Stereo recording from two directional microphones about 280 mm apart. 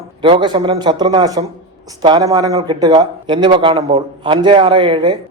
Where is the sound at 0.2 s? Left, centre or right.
Centre.